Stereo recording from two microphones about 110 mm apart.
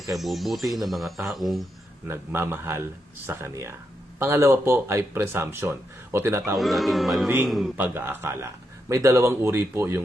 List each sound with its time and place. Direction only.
0.1 s speech: centre (ahead or behind)
2.0 s speech: 20° right (ahead or behind)
6.6 s speech: centre (ahead or behind)
7.8 s speech: 20° right (ahead or behind)